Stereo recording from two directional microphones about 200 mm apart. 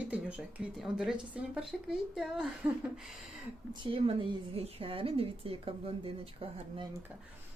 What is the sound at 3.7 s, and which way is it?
A woman's voice, 25° right (ahead or behind).